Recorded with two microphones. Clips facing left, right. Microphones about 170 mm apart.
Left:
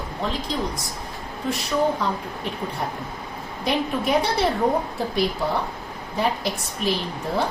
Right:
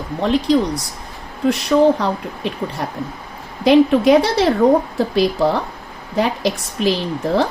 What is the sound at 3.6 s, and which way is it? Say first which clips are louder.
A woman's voice: right 12 dB; 90° right.